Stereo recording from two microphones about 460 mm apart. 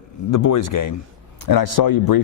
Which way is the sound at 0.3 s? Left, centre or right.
Left.